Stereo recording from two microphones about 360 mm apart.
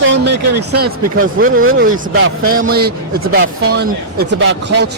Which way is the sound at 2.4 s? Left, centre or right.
Right.